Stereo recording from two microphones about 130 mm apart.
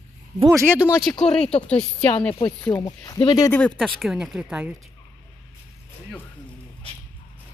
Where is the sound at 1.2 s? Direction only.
5° left (ahead or behind).